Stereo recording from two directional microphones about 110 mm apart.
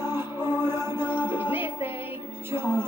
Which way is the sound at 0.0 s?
20° right (ahead or behind).